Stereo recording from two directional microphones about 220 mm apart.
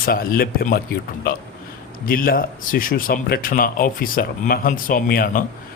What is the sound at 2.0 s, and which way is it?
A man's voice, 40° left (ahead or behind).